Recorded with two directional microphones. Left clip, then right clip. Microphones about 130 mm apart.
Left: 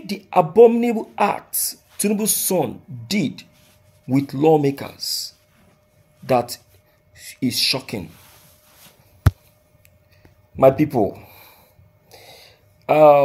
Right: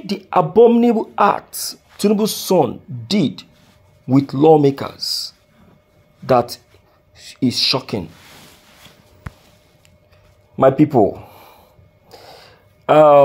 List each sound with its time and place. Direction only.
0.0 s speech: 20° right (ahead or behind)
10.5 s speech: 20° right (ahead or behind)
12.1 s a sound: 20° right (ahead or behind)